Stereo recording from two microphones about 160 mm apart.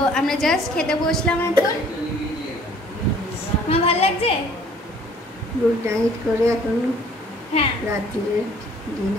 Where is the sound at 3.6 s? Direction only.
40° left (ahead or behind).